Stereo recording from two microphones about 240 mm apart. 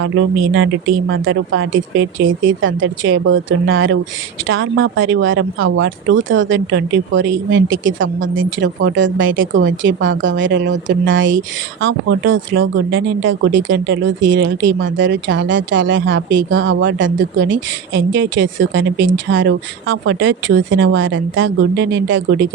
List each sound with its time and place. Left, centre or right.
0.5 s speech: right